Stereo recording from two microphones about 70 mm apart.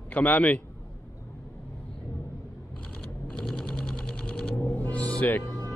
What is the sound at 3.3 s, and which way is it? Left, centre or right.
Sewing machine, centre.